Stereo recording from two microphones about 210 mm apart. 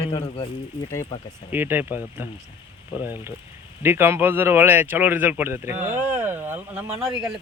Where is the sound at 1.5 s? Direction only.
10° right (ahead or behind).